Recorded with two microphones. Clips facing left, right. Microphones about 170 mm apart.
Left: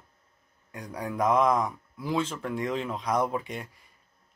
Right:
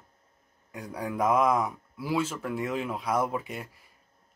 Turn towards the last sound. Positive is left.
turn(degrees=-5)  # may be behind; listen again after turning